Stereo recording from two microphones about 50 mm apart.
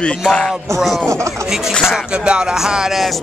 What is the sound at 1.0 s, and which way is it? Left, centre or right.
Speech, right.